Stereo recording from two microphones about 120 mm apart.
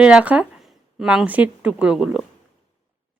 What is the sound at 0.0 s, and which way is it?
Speech, 10° right (ahead or behind).